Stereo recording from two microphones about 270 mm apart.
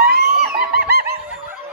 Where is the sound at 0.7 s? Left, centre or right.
Right.